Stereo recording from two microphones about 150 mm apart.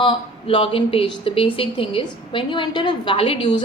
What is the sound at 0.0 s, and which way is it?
Speech, 35° left (ahead or behind).